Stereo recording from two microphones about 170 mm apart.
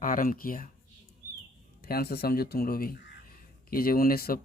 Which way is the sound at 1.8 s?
65° left (ahead or behind).